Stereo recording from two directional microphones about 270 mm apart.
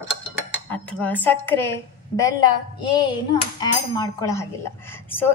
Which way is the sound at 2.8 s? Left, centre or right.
Centre.